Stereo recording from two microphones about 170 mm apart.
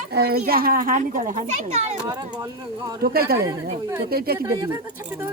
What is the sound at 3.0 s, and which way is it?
Speech, 65° right (ahead or behind).